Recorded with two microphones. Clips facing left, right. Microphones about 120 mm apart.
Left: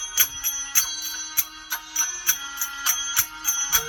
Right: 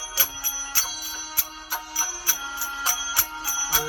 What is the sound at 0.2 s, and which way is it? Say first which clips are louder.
Music: right 2 dB; 25° right (ahead or behind).